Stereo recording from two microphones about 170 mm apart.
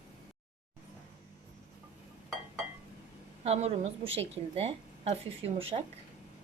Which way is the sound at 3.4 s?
40° right (ahead or behind).